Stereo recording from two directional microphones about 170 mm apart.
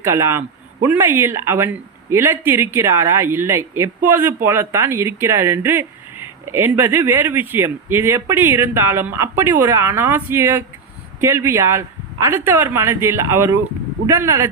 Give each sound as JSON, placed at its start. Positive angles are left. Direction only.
{"t": 0.0, "sound": "speech", "side_deg": -15}